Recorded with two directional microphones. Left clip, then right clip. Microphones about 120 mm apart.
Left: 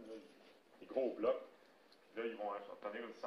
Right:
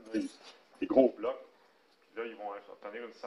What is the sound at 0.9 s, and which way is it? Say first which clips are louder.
A man's voice: right 10 dB; 30° right (ahead or behind).